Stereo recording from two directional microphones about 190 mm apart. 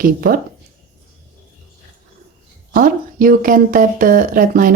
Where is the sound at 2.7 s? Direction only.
50° right (ahead or behind).